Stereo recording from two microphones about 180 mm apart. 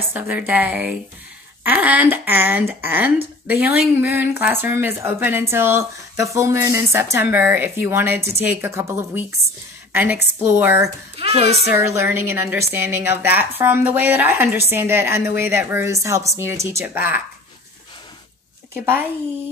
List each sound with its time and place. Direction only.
0.1 s speech: 10° right (ahead or behind)
11.1 s speech: 35° right (ahead or behind)
11.7 s speech: 15° right (ahead or behind)